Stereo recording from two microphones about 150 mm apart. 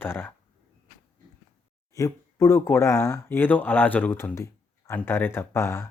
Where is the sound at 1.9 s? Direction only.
20° left (ahead or behind).